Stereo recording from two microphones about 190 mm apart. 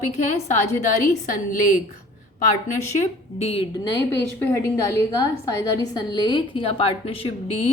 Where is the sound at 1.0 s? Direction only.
45° left (ahead or behind).